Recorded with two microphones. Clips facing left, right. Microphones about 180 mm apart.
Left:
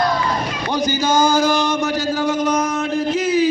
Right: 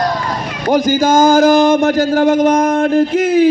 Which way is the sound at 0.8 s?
50° right (ahead or behind).